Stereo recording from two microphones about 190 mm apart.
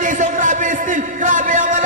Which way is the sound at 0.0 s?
40° right (ahead or behind).